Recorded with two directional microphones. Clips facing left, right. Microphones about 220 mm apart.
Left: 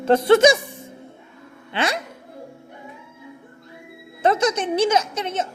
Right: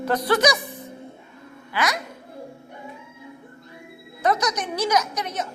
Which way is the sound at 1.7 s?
30° left (ahead or behind).